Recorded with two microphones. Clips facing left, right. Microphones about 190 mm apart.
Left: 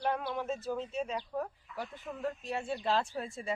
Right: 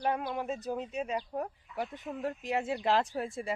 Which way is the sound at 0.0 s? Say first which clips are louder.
Right 1 dB; 10° right (ahead or behind).